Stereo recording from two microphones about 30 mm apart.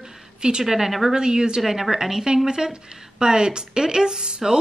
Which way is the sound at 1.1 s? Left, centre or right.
Right.